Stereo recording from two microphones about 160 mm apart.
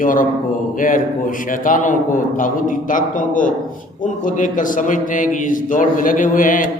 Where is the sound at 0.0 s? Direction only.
60° left (ahead or behind).